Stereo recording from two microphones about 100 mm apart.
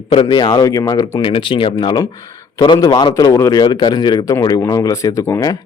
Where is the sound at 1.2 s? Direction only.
60° left (ahead or behind).